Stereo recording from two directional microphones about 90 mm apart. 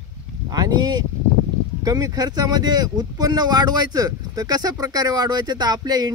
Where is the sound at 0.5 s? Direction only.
50° right (ahead or behind).